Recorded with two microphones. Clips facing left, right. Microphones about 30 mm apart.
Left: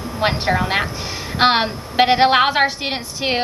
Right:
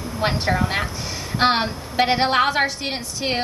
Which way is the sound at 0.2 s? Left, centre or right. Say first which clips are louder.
Left 3 dB; left.